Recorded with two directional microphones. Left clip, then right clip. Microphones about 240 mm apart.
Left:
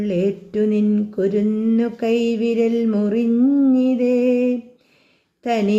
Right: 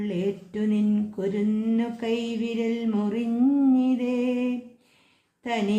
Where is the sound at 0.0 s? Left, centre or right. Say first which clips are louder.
Left 8 dB; centre.